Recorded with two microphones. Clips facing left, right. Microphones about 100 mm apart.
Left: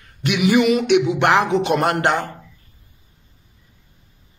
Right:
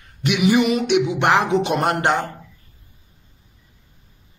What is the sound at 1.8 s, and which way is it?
Speech, 30° right (ahead or behind).